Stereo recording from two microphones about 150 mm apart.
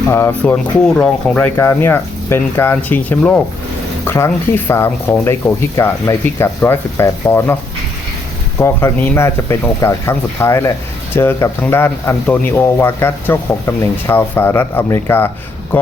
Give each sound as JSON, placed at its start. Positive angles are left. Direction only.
{"t": 0.1, "sound": "speech", "side_deg": 15}
{"t": 8.5, "sound": "speech", "side_deg": 15}